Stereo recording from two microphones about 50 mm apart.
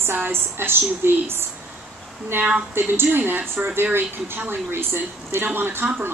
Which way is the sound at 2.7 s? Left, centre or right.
Right.